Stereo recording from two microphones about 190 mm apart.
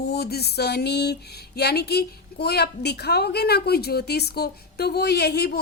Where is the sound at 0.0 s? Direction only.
55° left (ahead or behind).